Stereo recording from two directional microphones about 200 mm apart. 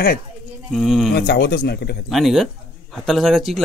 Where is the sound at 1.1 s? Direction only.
55° left (ahead or behind).